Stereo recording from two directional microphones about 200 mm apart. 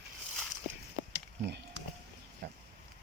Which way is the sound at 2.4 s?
50° right (ahead or behind).